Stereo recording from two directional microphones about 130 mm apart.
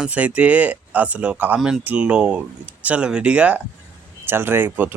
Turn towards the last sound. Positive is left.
turn(degrees=-15)  # may be behind; listen again after turning